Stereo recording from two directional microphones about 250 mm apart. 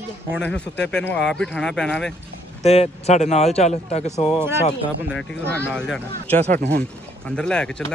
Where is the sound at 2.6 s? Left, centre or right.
Left.